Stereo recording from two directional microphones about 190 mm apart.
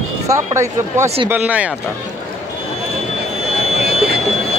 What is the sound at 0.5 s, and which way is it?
A man's voice, 15° right (ahead or behind).